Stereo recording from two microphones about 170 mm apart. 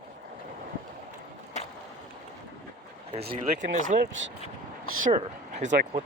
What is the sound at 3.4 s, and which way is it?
Speech, 50° right (ahead or behind).